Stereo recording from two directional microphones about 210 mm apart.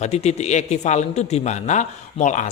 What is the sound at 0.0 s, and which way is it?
A man's voice, 30° left (ahead or behind).